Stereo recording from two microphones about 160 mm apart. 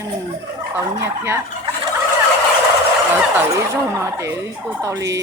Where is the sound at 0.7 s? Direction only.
15° right (ahead or behind).